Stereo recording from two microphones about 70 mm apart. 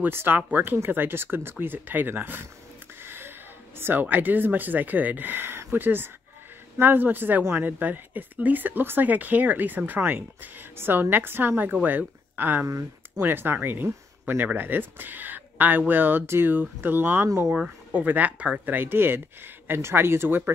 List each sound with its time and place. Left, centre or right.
0.0 s speech: right
12.6 s speech: right
13.2 s speech: right